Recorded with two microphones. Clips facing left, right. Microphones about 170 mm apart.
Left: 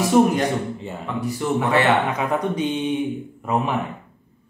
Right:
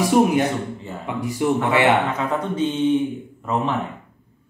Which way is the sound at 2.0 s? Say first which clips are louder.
Left 1 dB; 15° left (ahead or behind).